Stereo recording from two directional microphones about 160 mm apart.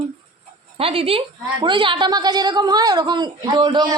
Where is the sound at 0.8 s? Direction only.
35° right (ahead or behind).